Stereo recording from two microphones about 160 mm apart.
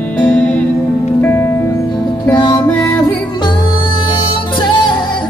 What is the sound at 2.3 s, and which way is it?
Music, 30° left (ahead or behind).